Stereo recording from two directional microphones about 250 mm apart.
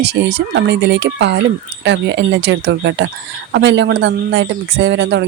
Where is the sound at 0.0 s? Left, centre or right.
Right.